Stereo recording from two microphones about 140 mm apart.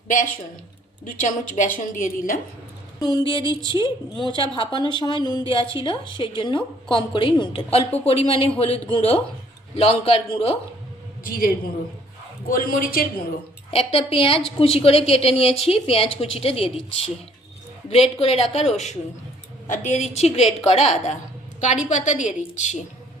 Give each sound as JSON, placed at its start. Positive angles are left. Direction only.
{"t": 1.0, "sound": "a woman's voice", "side_deg": 65}
{"t": 3.0, "sound": "a woman's voice", "side_deg": 30}
{"t": 11.2, "sound": "a man's voice", "side_deg": 90}
{"t": 13.7, "sound": "a woman's voice", "side_deg": 45}